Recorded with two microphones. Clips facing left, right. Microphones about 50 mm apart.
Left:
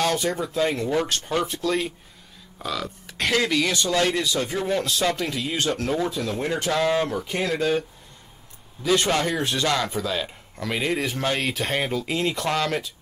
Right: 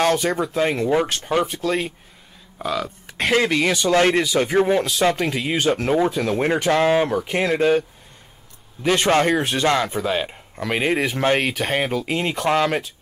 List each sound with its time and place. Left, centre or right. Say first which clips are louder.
0.0 s a sound: right 4 dB; right
0.3 s speech: right 3 dB; right
4.6 s speech: right 5 dB; right
8.8 s speech: right 4 dB; right